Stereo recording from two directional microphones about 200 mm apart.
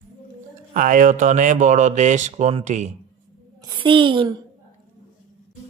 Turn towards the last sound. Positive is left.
turn(degrees=-25)  # may be behind; listen again after turning